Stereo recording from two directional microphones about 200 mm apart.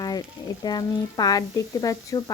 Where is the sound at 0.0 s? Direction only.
20° left (ahead or behind).